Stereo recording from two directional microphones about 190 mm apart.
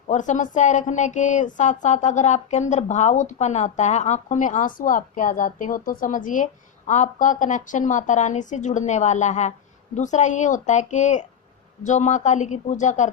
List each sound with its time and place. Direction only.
0.1 s a woman's voice: 40° left (ahead or behind)